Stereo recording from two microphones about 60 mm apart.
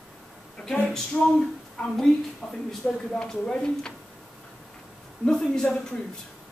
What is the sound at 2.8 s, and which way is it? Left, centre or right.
Speech, left.